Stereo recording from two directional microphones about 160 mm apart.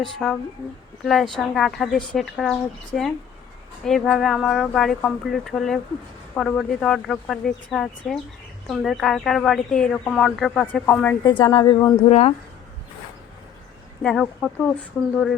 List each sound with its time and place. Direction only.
0.0 s speech: centre (ahead or behind)
11.2 s speech: 25° left (ahead or behind)
12.0 s speech: 40° left (ahead or behind)
14.0 s speech: 5° left (ahead or behind)